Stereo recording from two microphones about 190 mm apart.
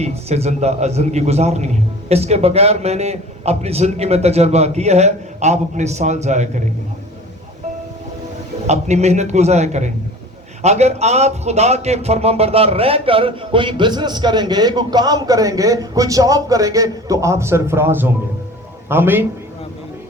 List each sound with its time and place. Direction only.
0.0 s a man's voice: 35° right (ahead or behind)
8.6 s a man's voice: 35° right (ahead or behind); by 19.2 s 10° right (ahead or behind)